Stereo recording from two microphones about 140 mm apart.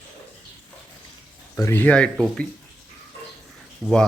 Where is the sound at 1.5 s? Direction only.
20° left (ahead or behind).